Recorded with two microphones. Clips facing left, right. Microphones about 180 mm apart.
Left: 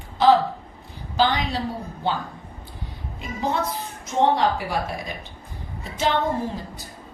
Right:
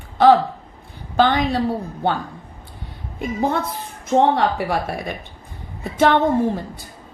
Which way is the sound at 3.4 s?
55° right (ahead or behind).